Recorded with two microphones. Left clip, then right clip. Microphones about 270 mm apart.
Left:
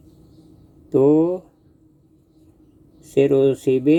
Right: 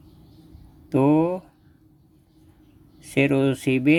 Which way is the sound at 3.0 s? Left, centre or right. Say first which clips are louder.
Left 5 dB; right.